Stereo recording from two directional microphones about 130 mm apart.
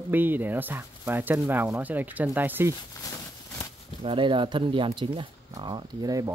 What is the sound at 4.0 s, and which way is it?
Speech, 40° right (ahead or behind).